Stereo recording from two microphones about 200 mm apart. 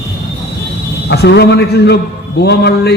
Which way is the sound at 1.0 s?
55° left (ahead or behind).